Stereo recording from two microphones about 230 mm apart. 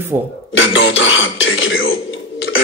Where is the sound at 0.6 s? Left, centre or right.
Left.